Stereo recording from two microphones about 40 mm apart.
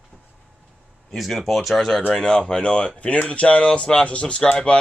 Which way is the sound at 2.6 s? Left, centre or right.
Left.